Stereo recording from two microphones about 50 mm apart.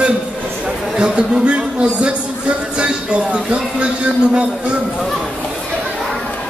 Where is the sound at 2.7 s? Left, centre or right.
Centre.